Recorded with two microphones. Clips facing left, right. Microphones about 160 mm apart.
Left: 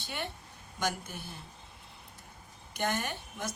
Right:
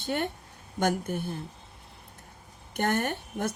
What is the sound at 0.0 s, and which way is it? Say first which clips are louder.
A woman's voice: right 9 dB; 50° right (ahead or behind).